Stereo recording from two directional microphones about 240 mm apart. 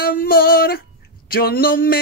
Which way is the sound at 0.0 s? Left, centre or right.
Left.